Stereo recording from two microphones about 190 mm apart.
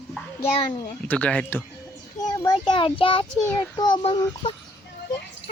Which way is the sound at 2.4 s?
20° left (ahead or behind).